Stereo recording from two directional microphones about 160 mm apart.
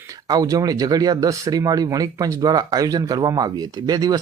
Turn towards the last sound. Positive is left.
turn(degrees=-25)  # may be behind; listen again after turning